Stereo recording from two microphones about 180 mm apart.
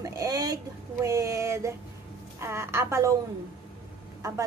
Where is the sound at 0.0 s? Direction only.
20° right (ahead or behind).